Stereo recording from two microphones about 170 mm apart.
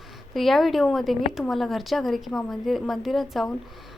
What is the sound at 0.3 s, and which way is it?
A woman's voice, centre (ahead or behind).